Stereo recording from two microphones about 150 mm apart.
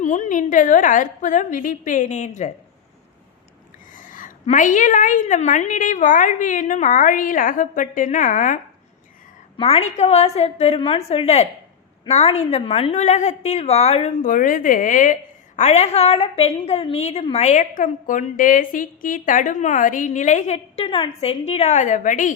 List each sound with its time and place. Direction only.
0.0 s a woman's voice: 55° left (ahead or behind)
3.9 s a woman's voice: 60° left (ahead or behind)
9.6 s a woman's voice: 40° left (ahead or behind)
20.8 s a woman's voice: 35° left (ahead or behind); by 22.4 s 60° left (ahead or behind)